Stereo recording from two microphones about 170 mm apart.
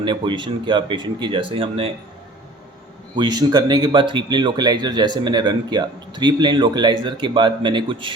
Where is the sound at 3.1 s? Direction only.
25° right (ahead or behind).